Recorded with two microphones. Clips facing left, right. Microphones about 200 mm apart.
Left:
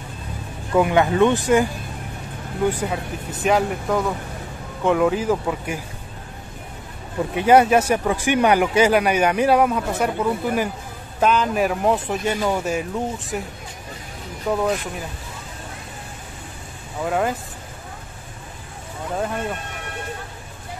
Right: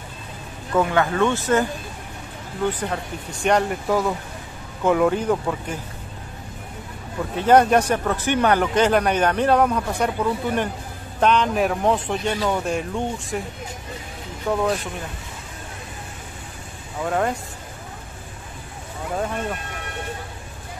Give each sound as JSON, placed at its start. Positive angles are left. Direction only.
{"t": 0.7, "sound": "speech", "side_deg": 15}
{"t": 2.7, "sound": "speech", "side_deg": 10}
{"t": 7.3, "sound": "speech", "side_deg": 10}
{"t": 14.5, "sound": "speech", "side_deg": 5}
{"t": 17.0, "sound": "speech", "side_deg": 5}
{"t": 19.1, "sound": "speech", "side_deg": 0}